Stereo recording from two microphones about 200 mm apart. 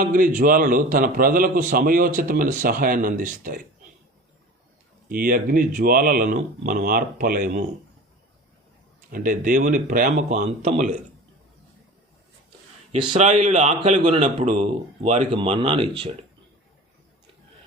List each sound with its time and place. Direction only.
0.0 s a man's voice: 45° right (ahead or behind)
5.0 s a man's voice: 45° right (ahead or behind)
9.1 s a man's voice: 45° right (ahead or behind)
12.9 s a man's voice: 30° right (ahead or behind)